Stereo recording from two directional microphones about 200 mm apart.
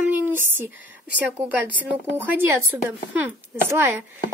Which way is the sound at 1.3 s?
10° right (ahead or behind).